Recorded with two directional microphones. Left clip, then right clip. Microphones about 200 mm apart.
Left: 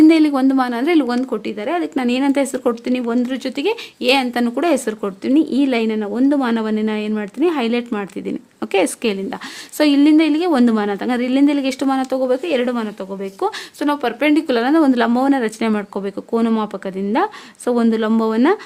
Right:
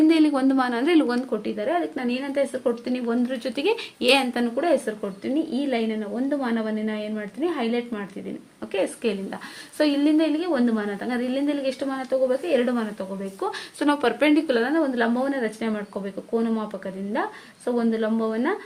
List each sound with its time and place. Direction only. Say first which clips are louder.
0.0 s a woman's voice: left 7 dB; 25° left (ahead or behind)
13.7 s speech: even; 20° left (ahead or behind); by 18.5 s 45° left (ahead or behind)